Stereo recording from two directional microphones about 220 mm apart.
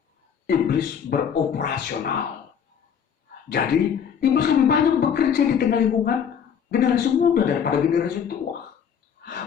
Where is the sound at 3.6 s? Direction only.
45° left (ahead or behind).